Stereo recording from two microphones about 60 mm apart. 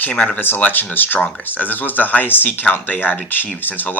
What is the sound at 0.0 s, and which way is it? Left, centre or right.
Speech, left.